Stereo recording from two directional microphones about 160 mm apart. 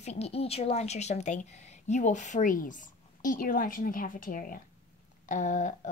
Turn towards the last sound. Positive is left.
turn(degrees=50)  # may be behind; listen again after turning